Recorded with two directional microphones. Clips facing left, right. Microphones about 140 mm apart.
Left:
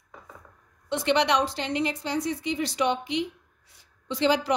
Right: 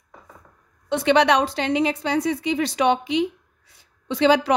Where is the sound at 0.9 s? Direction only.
60° right (ahead or behind); by 3.1 s 85° right.